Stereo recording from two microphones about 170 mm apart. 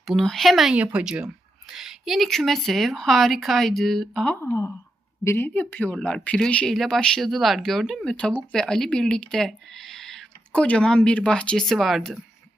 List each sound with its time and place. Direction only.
0.0 s speech: centre (ahead or behind)
4.4 s a woman's voice: 15° left (ahead or behind); by 12.2 s centre (ahead or behind)